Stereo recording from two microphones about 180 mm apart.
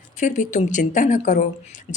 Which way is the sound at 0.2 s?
45° left (ahead or behind).